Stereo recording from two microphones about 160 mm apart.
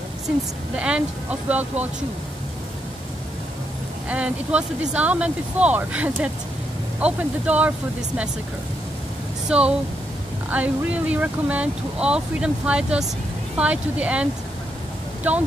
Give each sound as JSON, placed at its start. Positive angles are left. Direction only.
{"t": 0.7, "sound": "speech", "side_deg": -5}
{"t": 4.1, "sound": "speech", "side_deg": -10}
{"t": 9.5, "sound": "speech", "side_deg": -5}